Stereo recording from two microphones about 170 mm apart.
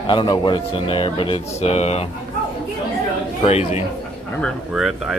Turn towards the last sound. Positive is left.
turn(degrees=0)  # may be behind; listen again after turning